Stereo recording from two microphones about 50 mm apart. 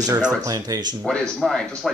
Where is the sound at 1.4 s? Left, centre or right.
Centre.